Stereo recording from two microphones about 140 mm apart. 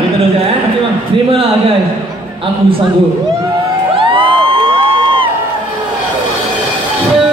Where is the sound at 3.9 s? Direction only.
40° right (ahead or behind).